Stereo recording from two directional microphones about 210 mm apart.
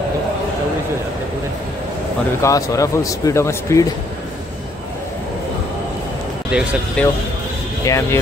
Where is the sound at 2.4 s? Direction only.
15° left (ahead or behind).